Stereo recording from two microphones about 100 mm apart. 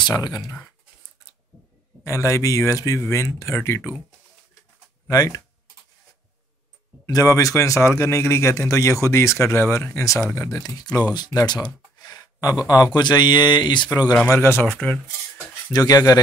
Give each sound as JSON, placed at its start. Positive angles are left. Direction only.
{"t": 2.0, "sound": "a man's voice", "side_deg": 30}
{"t": 5.1, "sound": "a man's voice", "side_deg": 40}
{"t": 7.1, "sound": "a man's voice", "side_deg": 35}
{"t": 11.1, "sound": "a sound", "side_deg": 45}
{"t": 12.6, "sound": "a man's voice", "side_deg": 40}
{"t": 14.3, "sound": "speech", "side_deg": 25}
{"t": 15.7, "sound": "a man's voice", "side_deg": 40}